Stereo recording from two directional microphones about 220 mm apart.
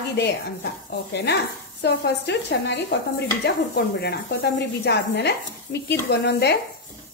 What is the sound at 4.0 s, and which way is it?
Speech, 50° left (ahead or behind).